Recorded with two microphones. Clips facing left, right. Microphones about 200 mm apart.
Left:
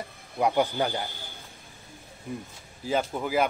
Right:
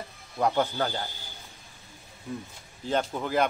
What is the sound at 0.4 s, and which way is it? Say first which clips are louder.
Speech: left 1 dB; 15° left (ahead or behind).